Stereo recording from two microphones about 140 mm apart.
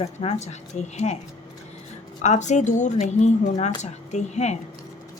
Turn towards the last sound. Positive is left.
turn(degrees=55)  # may be behind; listen again after turning